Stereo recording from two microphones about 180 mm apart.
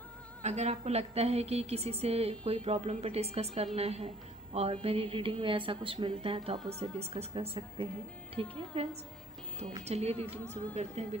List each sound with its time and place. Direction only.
0.4 s a woman's voice: 40° right (ahead or behind)